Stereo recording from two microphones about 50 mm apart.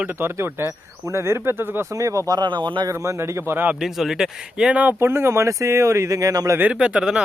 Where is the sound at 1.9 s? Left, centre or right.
Right.